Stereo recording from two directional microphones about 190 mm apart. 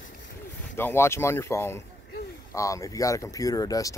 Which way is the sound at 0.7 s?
10° left (ahead or behind).